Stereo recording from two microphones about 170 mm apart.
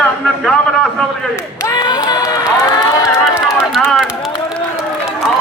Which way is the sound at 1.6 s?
20° left (ahead or behind).